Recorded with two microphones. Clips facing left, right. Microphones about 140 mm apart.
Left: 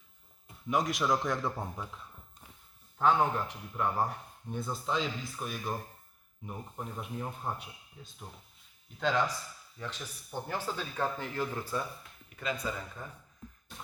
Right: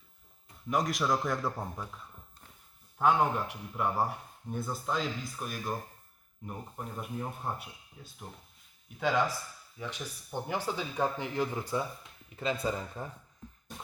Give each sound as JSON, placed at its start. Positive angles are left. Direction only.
{"t": 0.7, "sound": "speech", "side_deg": 0}
{"t": 3.0, "sound": "speech", "side_deg": -10}
{"t": 12.4, "sound": "speech", "side_deg": -30}